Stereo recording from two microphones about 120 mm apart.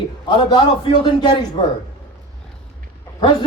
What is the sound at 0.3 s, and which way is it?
Speech, 40° left (ahead or behind).